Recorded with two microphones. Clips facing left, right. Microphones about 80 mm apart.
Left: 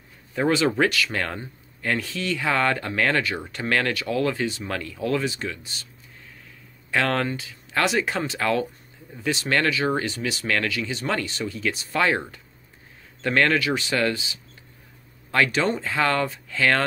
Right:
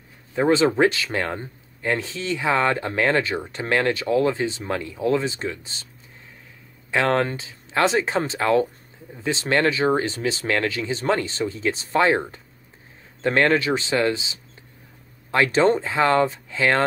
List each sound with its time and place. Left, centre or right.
0.3 s speech: right
6.9 s speech: right